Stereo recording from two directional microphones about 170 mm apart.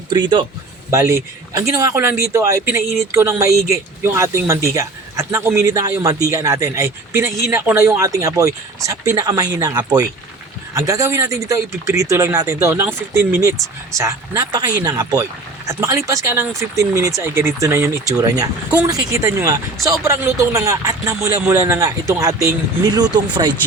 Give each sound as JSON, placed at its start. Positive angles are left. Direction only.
{"t": 0.1, "sound": "speech", "side_deg": -25}
{"t": 0.9, "sound": "speech", "side_deg": -15}